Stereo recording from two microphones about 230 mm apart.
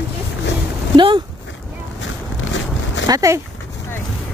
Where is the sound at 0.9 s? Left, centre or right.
Right.